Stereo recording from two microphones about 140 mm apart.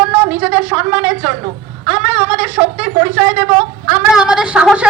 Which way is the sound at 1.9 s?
10° right (ahead or behind).